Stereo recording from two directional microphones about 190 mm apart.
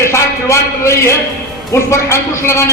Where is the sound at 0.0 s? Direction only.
15° left (ahead or behind).